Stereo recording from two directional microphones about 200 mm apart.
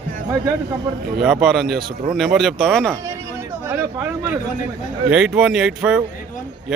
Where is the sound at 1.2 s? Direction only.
5° right (ahead or behind).